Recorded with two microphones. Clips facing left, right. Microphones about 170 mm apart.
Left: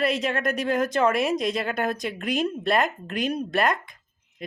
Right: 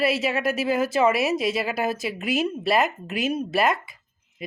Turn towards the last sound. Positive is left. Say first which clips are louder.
# right 1 dB
turn(degrees=-5)  # may be behind; listen again after turning